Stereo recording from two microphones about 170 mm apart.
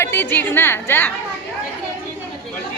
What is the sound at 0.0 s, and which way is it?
Speech, 10° left (ahead or behind).